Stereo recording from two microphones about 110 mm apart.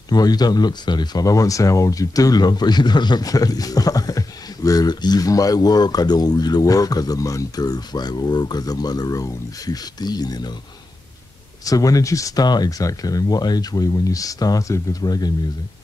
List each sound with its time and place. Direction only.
0.1 s speech: 40° left (ahead or behind)
11.6 s speech: 30° left (ahead or behind)